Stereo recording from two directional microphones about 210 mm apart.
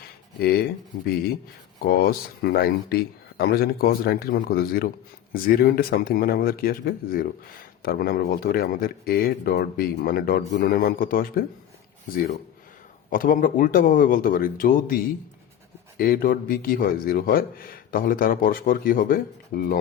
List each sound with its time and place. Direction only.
0.3 s speech: 50° left (ahead or behind)
1.9 s a man's voice: 50° left (ahead or behind)
13.1 s speech: 40° left (ahead or behind)
16.0 s a man's voice: 45° left (ahead or behind)